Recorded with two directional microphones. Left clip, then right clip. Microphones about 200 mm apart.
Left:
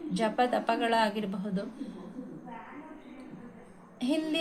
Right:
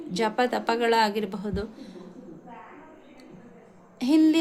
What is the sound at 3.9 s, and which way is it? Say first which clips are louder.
Speech: right 10 dB; 55° right (ahead or behind).